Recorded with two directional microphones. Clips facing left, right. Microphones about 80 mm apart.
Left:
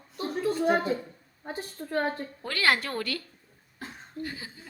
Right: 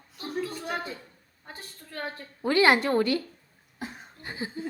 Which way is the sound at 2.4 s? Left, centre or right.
Right.